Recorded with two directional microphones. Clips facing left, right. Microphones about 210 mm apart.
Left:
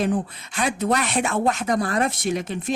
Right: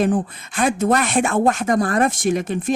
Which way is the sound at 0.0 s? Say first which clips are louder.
Right 4 dB; 50° right (ahead or behind).